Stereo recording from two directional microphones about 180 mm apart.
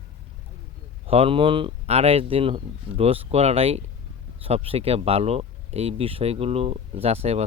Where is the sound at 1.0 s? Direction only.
30° right (ahead or behind).